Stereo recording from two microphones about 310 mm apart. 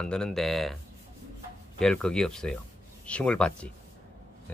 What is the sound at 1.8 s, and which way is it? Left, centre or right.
Speech, centre.